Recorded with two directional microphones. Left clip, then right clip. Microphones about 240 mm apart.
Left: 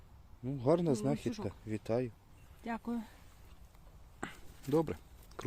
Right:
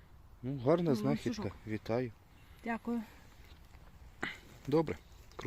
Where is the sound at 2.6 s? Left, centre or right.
Centre.